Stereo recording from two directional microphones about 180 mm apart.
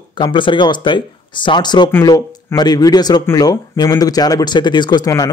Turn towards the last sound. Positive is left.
turn(degrees=20)  # may be behind; listen again after turning